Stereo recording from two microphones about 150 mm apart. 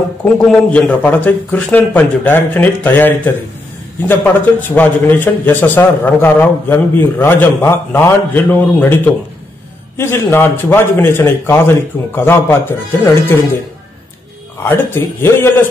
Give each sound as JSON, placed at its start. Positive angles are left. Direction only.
{"t": 0.2, "sound": "a man's voice", "side_deg": 5}
{"t": 14.6, "sound": "a man's voice", "side_deg": 15}